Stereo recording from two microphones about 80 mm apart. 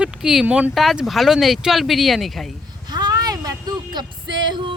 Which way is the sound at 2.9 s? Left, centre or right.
Right.